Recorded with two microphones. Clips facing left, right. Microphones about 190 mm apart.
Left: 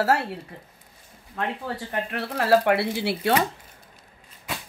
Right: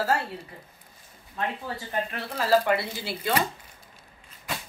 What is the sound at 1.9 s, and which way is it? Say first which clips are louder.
Speech: left 1 dB; 65° left (ahead or behind).